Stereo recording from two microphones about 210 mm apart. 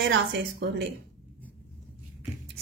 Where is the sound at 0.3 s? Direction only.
55° right (ahead or behind).